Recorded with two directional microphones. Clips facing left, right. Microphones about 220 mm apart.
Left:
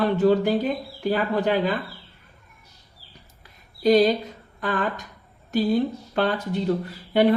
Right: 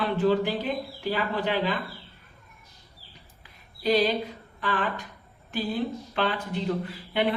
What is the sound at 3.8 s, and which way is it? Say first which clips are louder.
Speech: left 6 dB; 40° left (ahead or behind).